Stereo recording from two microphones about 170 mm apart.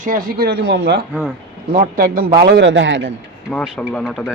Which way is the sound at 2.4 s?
85° right.